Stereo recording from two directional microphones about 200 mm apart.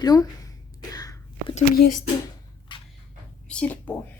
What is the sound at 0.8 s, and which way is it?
Whispering, 20° left (ahead or behind).